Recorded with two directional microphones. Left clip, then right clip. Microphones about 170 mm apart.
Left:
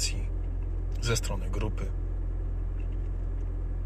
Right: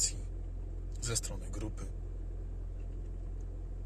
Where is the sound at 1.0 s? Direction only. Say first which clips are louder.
Left 7 dB; 10° right (ahead or behind).